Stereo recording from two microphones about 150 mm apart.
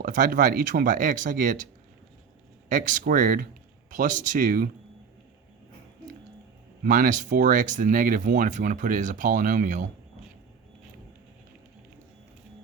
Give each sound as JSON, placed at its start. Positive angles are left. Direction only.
{"t": 0.0, "sound": "speech", "side_deg": -60}
{"t": 6.8, "sound": "speech", "side_deg": -65}